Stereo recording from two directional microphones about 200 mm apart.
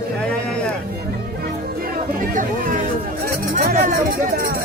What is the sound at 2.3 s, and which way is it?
Speech, 40° right (ahead or behind).